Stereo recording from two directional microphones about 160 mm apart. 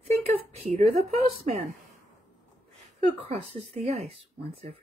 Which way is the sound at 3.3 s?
40° right (ahead or behind).